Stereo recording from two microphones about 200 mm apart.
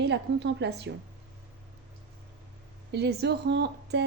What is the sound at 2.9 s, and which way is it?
A woman's voice, 55° right (ahead or behind).